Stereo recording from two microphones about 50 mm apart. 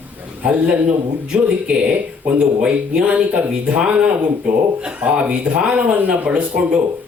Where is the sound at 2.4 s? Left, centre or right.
Right.